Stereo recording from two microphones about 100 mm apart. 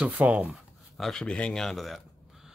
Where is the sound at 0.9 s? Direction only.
5° left (ahead or behind).